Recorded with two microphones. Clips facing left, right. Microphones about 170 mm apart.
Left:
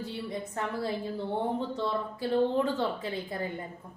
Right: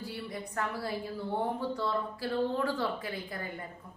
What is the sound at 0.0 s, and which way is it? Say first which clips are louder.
A woman's voice: left 4 dB; 25° left (ahead or behind).